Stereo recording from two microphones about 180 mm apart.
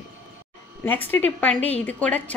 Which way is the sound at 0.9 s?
10° left (ahead or behind).